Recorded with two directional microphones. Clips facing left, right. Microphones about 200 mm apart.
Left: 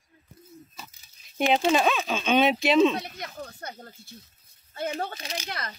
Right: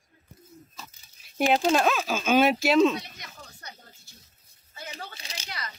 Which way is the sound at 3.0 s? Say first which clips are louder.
Left 6 dB; 50° left (ahead or behind).